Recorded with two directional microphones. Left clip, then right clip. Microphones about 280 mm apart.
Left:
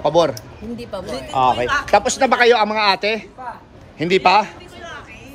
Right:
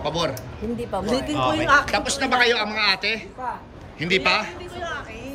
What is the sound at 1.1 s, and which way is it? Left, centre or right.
Speech, right.